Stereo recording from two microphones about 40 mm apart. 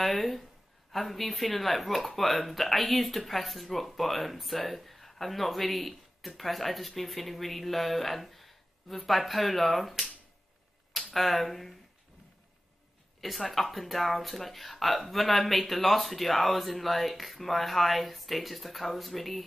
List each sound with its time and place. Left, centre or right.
0.0 s a woman's voice: centre
13.2 s speech: centre